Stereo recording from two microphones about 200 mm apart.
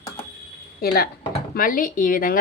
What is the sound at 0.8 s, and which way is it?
Speech, 50° left (ahead or behind).